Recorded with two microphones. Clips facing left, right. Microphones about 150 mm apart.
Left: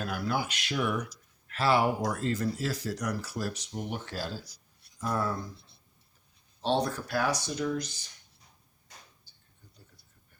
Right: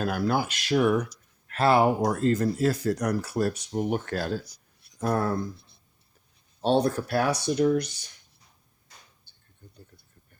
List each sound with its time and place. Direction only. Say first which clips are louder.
0.0 s speech: right 6 dB; 45° right (ahead or behind)
6.6 s speech: right 6 dB; 55° right (ahead or behind)